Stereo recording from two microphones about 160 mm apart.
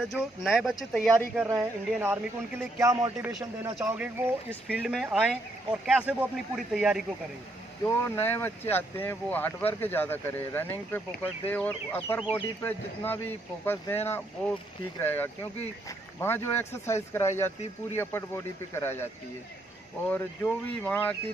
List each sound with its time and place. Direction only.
0.0 s speech: centre (ahead or behind)
1.3 s speech: 10° right (ahead or behind)
7.8 s speech: 15° left (ahead or behind)
20.1 s speech: 10° left (ahead or behind)